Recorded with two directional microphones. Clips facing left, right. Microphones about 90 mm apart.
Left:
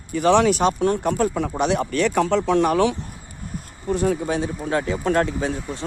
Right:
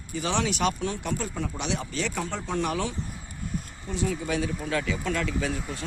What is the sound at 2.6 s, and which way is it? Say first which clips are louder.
Speech: left 7 dB; 50° left (ahead or behind).